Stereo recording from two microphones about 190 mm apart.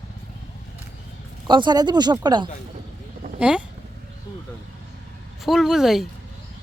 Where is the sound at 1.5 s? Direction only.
25° right (ahead or behind).